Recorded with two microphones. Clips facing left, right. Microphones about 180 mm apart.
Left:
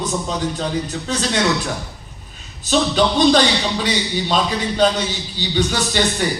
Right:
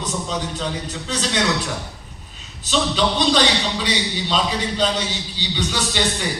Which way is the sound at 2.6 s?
50° left (ahead or behind).